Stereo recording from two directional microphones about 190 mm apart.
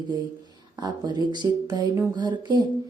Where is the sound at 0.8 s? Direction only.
20° right (ahead or behind).